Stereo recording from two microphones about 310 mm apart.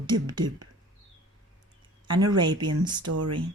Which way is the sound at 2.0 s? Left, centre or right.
Centre.